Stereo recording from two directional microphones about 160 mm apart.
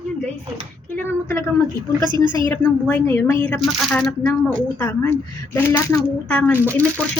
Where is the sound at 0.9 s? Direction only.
15° left (ahead or behind).